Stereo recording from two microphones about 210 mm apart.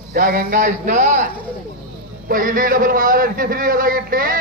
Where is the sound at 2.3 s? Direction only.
40° right (ahead or behind).